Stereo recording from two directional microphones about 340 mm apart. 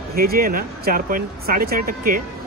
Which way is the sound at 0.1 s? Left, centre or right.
Right.